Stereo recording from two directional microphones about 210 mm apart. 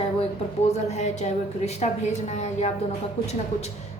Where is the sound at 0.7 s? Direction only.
35° left (ahead or behind).